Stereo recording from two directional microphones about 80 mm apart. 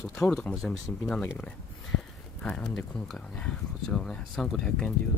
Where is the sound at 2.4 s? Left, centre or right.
Centre.